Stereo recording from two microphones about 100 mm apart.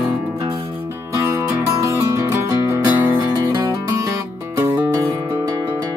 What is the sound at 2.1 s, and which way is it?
Music, 25° right (ahead or behind).